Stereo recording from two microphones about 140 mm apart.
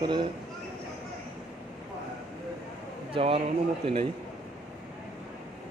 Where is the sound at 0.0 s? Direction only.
35° right (ahead or behind).